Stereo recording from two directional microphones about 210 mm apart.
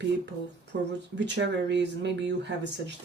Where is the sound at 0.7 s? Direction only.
50° right (ahead or behind).